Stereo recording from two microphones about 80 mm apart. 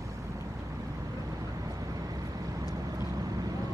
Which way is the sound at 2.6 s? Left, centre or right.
Right.